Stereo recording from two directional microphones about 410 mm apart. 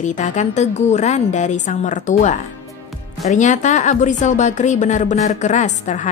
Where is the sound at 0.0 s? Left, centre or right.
Centre.